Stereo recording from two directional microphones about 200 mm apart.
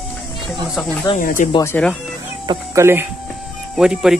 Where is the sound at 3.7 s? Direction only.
Centre (ahead or behind).